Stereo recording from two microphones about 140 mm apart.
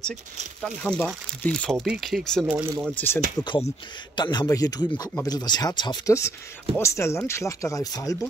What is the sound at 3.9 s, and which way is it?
Speech, 30° left (ahead or behind).